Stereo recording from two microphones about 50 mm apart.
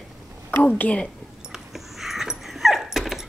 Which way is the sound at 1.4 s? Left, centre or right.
Centre.